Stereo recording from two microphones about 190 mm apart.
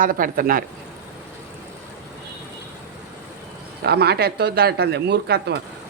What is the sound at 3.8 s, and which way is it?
Speech, 60° right (ahead or behind).